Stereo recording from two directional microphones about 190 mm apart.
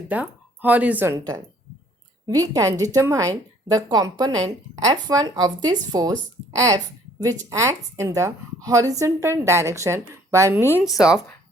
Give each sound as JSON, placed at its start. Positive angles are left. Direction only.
{"t": 0.1, "sound": "speech", "side_deg": -10}